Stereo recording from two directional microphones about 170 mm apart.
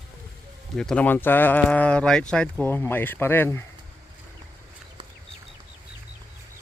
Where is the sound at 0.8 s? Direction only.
5° left (ahead or behind).